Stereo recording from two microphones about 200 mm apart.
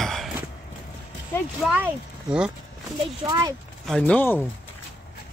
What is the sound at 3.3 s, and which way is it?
Speech, 20° right (ahead or behind).